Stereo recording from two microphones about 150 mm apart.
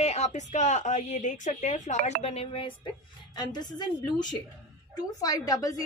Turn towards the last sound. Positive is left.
turn(degrees=25)  # may be behind; listen again after turning